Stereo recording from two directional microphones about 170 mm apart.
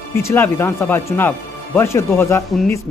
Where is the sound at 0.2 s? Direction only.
15° left (ahead or behind).